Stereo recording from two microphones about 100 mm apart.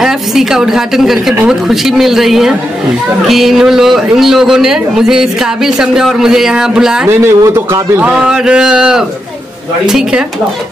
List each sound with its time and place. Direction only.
0.0 s a man's voice: 5° right (ahead or behind)
7.1 s a man's voice: 30° right (ahead or behind)
8.0 s a man's voice: 10° right (ahead or behind)